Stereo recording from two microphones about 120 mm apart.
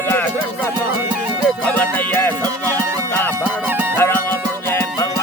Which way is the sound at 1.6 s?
15° left (ahead or behind).